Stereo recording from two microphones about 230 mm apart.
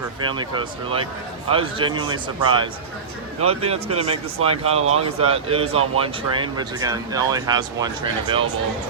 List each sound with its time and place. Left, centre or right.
0.3 s speech: right
3.4 s speech: right